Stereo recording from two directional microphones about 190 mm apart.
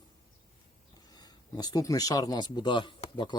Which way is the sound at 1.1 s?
20° left (ahead or behind).